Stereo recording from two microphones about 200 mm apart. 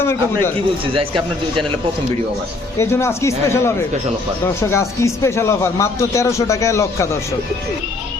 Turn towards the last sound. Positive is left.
turn(degrees=15)  # may be behind; listen again after turning